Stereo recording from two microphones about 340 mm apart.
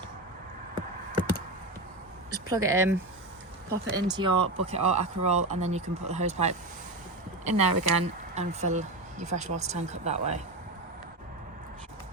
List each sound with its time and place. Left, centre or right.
2.3 s speech: centre
7.5 s speech: right
8.4 s speech: right